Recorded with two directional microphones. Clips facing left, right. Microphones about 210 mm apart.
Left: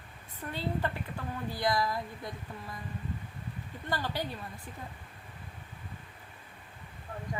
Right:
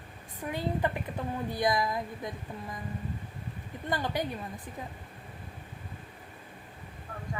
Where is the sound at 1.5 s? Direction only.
20° right (ahead or behind).